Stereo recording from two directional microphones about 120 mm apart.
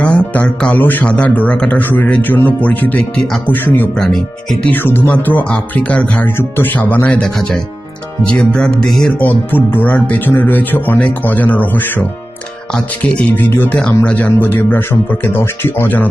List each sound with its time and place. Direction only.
0.0 s speech: 10° left (ahead or behind)
3.4 s speech: 15° left (ahead or behind)
3.9 s speech: 5° left (ahead or behind)
4.7 s speech: 20° left (ahead or behind); by 9.1 s centre (ahead or behind)
9.5 s speech: 15° left (ahead or behind)